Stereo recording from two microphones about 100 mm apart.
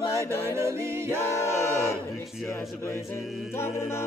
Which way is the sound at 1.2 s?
25° left (ahead or behind).